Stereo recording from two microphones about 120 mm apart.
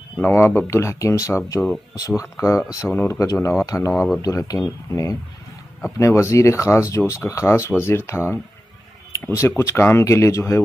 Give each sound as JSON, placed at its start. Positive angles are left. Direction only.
{"t": 0.2, "sound": "speech", "side_deg": 20}